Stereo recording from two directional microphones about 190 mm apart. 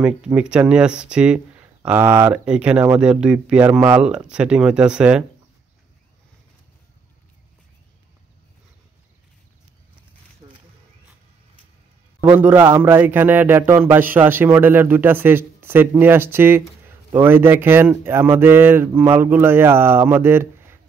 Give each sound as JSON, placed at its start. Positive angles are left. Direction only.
{"t": 0.0, "sound": "a man's voice", "side_deg": -5}
{"t": 10.4, "sound": "a sound", "side_deg": -25}
{"t": 12.3, "sound": "a man's voice", "side_deg": -10}